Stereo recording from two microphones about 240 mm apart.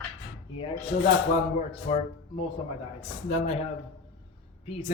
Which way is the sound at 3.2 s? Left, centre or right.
Left.